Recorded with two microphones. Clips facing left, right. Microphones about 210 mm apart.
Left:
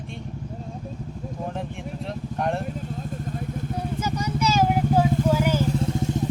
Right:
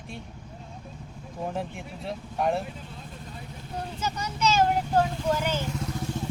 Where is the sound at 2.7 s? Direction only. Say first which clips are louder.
Left 10 dB; 45° left (ahead or behind).